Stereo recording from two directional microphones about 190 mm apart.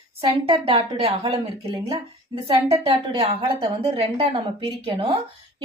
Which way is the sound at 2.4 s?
30° right (ahead or behind).